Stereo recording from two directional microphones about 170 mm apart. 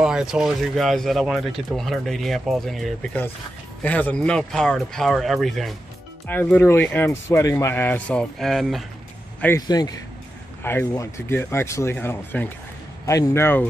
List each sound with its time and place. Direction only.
0.0 s speech: 5° right (ahead or behind)
6.2 s a man's voice: 10° left (ahead or behind)
9.6 s a man's voice: 20° left (ahead or behind)